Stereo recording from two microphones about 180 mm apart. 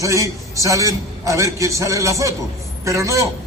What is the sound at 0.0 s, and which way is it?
A man's voice, 15° right (ahead or behind).